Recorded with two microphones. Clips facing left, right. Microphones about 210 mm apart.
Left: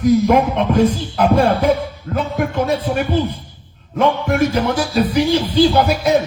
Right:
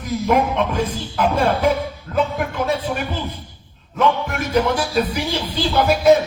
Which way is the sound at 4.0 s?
45° left (ahead or behind).